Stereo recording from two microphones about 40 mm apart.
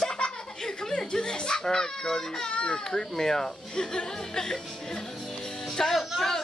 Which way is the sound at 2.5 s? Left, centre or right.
Left.